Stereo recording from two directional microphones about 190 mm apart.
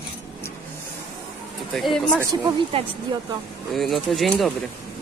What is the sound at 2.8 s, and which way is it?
Speech, 30° right (ahead or behind).